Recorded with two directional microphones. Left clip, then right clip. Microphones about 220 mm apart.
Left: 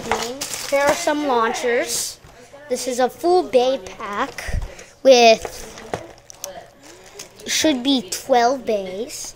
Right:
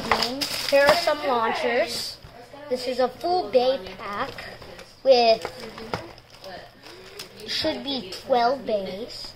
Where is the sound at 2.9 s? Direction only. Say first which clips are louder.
Left 6 dB; 55° left (ahead or behind).